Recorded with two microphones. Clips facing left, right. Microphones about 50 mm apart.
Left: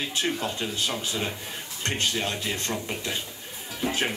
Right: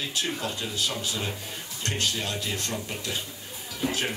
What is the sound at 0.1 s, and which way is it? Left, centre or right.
Speech, left.